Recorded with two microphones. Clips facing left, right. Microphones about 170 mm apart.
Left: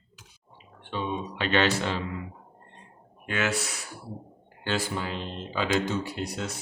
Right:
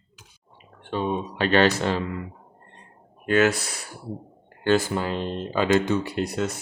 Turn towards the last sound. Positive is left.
turn(degrees=-55)  # may be behind; listen again after turning